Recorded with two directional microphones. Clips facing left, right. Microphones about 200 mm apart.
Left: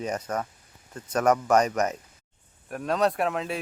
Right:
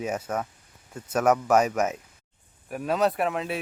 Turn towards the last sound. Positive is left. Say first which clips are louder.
# even
turn(degrees=0)  # may be behind; listen again after turning